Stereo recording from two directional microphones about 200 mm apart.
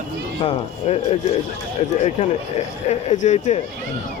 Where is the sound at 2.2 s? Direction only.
35° left (ahead or behind).